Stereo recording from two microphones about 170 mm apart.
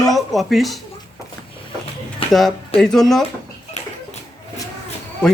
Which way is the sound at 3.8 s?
40° left (ahead or behind).